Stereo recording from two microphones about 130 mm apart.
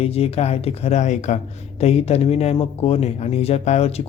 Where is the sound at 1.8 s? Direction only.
55° left (ahead or behind).